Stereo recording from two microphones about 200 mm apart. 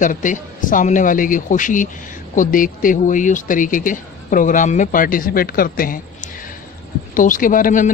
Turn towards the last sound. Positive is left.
turn(degrees=40)  # may be behind; listen again after turning